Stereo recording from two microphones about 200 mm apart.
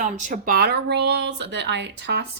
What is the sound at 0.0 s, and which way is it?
Speech, 40° right (ahead or behind).